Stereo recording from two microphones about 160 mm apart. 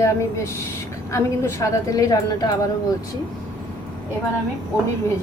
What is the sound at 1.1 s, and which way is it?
A woman's voice, 20° left (ahead or behind).